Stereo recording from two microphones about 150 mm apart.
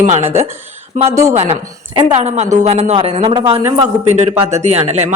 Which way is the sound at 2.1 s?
50° right (ahead or behind).